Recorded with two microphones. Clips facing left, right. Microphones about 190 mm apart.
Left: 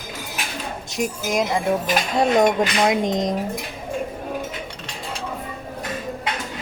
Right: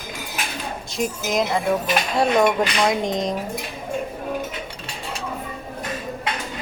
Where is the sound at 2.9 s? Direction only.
20° left (ahead or behind).